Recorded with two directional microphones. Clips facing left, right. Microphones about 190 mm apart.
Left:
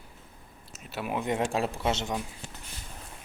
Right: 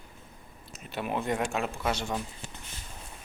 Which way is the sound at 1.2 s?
20° left (ahead or behind).